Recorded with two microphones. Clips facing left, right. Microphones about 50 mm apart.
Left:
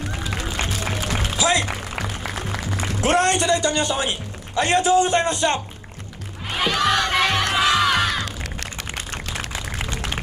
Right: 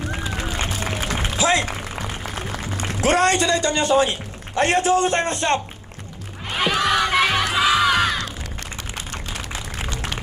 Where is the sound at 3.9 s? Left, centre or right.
Right.